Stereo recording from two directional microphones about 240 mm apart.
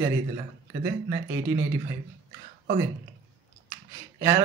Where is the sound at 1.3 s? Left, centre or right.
Centre.